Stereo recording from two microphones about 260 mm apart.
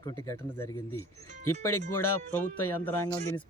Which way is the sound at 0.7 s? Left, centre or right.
Left.